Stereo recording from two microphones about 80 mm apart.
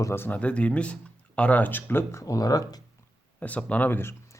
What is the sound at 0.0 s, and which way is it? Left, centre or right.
Speech, left.